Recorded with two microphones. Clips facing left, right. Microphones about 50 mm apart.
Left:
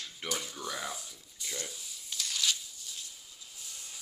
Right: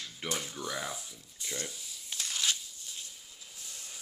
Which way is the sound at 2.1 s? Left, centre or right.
Right.